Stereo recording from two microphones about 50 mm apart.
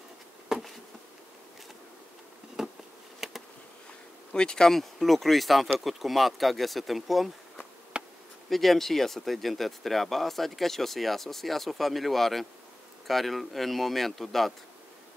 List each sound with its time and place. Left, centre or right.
0.5 s insect: centre
2.6 s insect: centre
3.2 s bee: centre
4.3 s speech: centre
7.9 s bee: centre
8.5 s speech: centre